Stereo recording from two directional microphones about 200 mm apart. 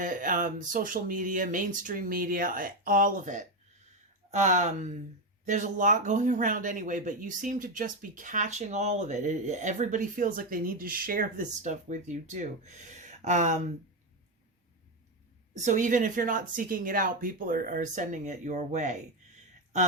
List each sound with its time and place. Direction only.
0.0 s speech: 40° right (ahead or behind)
15.5 s speech: 40° right (ahead or behind)